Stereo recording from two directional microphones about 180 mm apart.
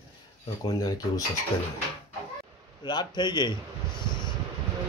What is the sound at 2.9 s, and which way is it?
Speech, 25° left (ahead or behind).